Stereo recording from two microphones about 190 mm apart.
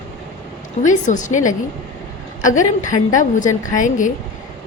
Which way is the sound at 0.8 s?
40° left (ahead or behind).